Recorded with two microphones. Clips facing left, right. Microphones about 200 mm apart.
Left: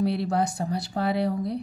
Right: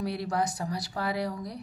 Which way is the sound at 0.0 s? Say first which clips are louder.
Left 5 dB; 25° left (ahead or behind).